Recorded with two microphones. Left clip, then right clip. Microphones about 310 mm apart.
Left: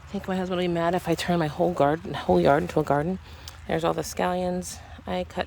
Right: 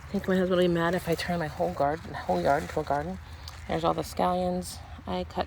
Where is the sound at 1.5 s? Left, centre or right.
Left.